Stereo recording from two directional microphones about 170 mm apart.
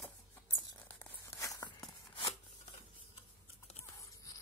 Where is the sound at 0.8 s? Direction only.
15° left (ahead or behind).